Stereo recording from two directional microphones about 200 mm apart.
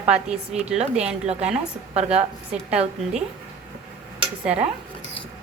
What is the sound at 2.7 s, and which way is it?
Speech, 5° right (ahead or behind).